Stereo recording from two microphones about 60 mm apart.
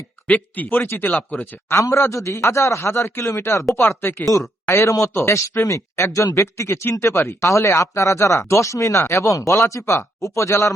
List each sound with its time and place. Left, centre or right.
0.3 s speech: left
1.7 s a man's voice: left
3.8 s a man's voice: left